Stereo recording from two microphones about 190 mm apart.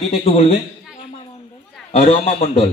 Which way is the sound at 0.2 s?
30° left (ahead or behind).